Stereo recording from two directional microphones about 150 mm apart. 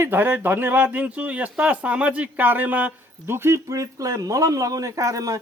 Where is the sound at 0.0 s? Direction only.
15° right (ahead or behind).